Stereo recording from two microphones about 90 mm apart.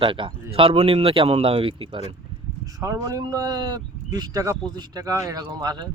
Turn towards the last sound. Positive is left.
turn(degrees=-55)  # may be behind; listen again after turning